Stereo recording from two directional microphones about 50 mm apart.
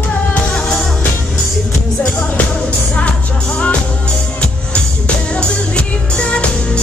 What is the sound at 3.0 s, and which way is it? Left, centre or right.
Music, left.